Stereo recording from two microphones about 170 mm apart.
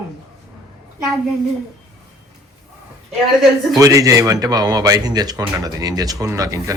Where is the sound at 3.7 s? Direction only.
20° right (ahead or behind).